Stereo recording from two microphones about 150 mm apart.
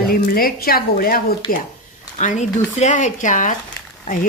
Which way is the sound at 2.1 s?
55° left (ahead or behind).